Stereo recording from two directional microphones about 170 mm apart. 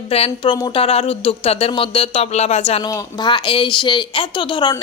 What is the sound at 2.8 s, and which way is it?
A woman's voice, 25° left (ahead or behind).